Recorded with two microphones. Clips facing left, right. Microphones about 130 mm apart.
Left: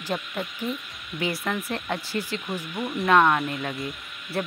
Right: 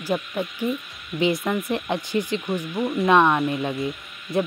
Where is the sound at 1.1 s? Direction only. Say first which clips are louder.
Right 6 dB; 20° right (ahead or behind).